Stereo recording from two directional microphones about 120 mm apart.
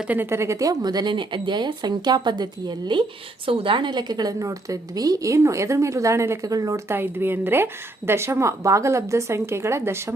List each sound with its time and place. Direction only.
0.1 s a woman's voice: 20° right (ahead or behind); by 3.0 s 35° right (ahead or behind)
3.4 s a woman's voice: 50° right (ahead or behind); by 10.2 s 20° right (ahead or behind)